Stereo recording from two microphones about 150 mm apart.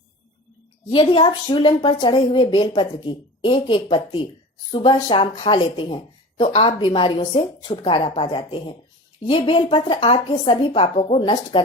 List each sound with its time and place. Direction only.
0.9 s speech: 35° left (ahead or behind)